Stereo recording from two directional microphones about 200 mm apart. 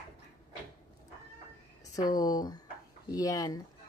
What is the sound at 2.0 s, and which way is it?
Speech, 20° left (ahead or behind).